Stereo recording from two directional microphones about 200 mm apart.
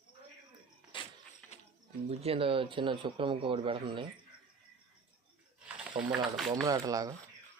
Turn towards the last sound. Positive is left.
turn(degrees=-15)  # may be behind; listen again after turning